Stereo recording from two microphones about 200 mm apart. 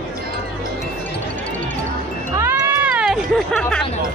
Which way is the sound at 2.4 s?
10° right (ahead or behind).